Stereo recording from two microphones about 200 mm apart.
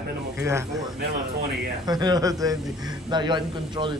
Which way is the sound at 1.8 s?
20° right (ahead or behind).